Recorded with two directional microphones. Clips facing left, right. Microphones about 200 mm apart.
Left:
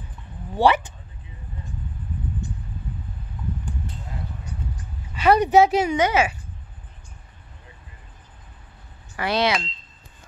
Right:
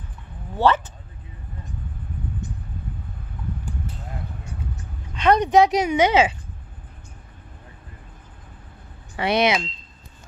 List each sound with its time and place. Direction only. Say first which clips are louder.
0.6 s speech: left 1 dB; 10° left (ahead or behind)
5.1 s speech: even; 5° left (ahead or behind)
5.9 s speech: right 3 dB; 20° right (ahead or behind)
9.1 s speech: right 2 dB; 20° right (ahead or behind)